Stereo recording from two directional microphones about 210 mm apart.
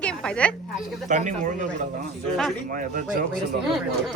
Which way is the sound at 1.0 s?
35° right (ahead or behind).